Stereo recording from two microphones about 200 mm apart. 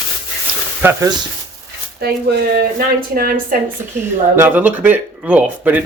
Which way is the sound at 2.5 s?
45° right (ahead or behind).